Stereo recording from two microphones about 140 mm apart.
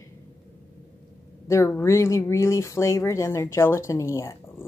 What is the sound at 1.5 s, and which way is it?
Speech, 20° left (ahead or behind).